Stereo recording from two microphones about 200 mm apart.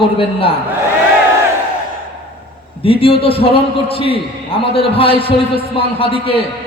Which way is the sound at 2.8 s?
30° left (ahead or behind).